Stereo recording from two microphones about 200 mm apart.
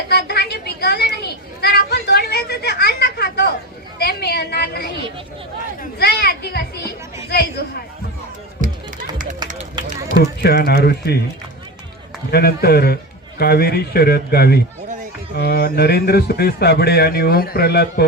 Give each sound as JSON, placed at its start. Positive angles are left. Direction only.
{"t": 0.1, "sound": "children playing", "side_deg": 55}
{"t": 3.9, "sound": "a man's voice", "side_deg": 55}
{"t": 6.0, "sound": "children playing", "side_deg": 50}
{"t": 8.6, "sound": "music", "side_deg": -40}
{"t": 10.4, "sound": "a man's voice", "side_deg": 50}
{"t": 12.3, "sound": "a man's voice", "side_deg": 50}